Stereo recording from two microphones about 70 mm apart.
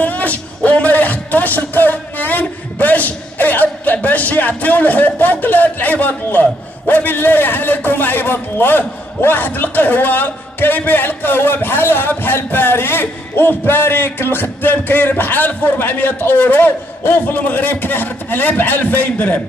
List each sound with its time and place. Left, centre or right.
0.0 s speech: left